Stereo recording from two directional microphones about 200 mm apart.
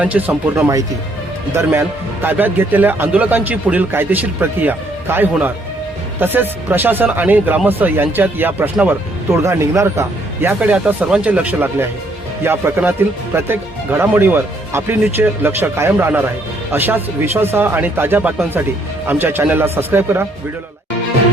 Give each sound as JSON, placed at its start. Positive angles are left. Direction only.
{"t": 0.0, "sound": "speech", "side_deg": -5}
{"t": 2.2, "sound": "speech", "side_deg": -10}